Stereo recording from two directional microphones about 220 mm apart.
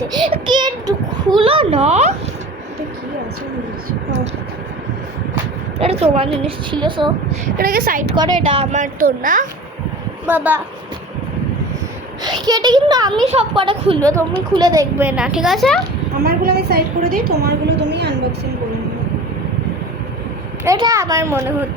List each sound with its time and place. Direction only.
0.1 s a child's voice: 20° right (ahead or behind)
5.8 s a child's voice: 25° right (ahead or behind)
7.6 s speech: 40° right (ahead or behind)
8.1 s speech: 20° right (ahead or behind); by 9.5 s 35° right (ahead or behind)
10.2 s a child's voice: 10° right (ahead or behind)
12.2 s a child's voice: 20° right (ahead or behind); by 15.8 s centre (ahead or behind)
16.2 s a woman's voice: 45° right (ahead or behind)
20.7 s a child's voice: 15° right (ahead or behind)